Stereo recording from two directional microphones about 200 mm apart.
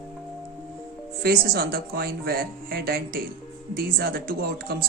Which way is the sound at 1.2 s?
50° right (ahead or behind).